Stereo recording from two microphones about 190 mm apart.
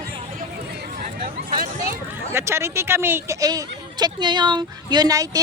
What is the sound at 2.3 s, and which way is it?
Speech, 15° right (ahead or behind).